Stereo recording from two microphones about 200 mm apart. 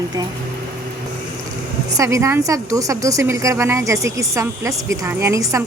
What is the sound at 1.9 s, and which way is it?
A woman's voice, 15° right (ahead or behind).